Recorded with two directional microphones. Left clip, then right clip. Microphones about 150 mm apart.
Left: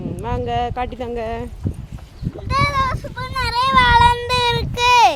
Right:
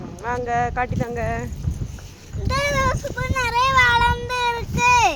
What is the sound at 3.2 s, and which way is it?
Child singing, 50° left (ahead or behind).